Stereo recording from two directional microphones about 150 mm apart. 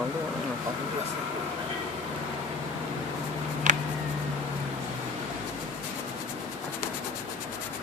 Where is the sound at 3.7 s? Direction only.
60° right (ahead or behind).